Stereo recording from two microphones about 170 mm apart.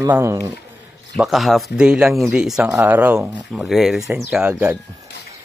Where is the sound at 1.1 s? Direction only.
Centre (ahead or behind).